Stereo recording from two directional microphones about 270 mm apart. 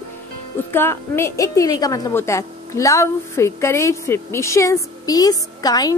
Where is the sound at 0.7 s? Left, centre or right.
Centre.